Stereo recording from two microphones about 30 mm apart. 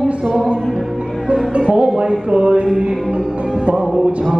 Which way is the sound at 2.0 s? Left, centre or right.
Right.